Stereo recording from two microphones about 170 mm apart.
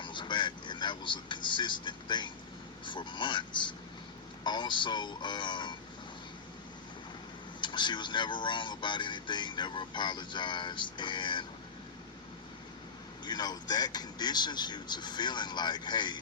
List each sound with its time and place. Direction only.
0.0 s speech: 25° left (ahead or behind)
7.6 s speech: 25° left (ahead or behind)
13.2 s speech: 25° left (ahead or behind)